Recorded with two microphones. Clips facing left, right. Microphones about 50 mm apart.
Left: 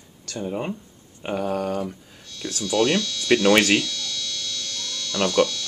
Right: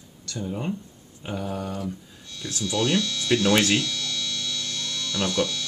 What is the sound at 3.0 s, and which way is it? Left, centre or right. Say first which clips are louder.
Speech: even; right.